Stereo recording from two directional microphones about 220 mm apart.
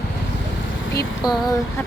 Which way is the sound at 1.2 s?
15° left (ahead or behind).